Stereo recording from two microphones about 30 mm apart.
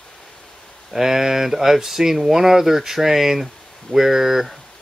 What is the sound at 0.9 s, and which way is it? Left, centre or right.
Speech, centre.